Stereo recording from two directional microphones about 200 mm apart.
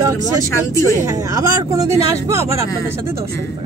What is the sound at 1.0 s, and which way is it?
Speech, 15° right (ahead or behind).